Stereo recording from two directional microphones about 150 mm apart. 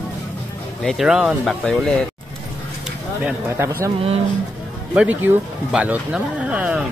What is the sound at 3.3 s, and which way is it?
Speech, 15° right (ahead or behind).